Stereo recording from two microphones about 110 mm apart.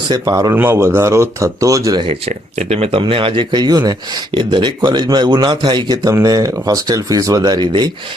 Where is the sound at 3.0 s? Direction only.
55° right (ahead or behind).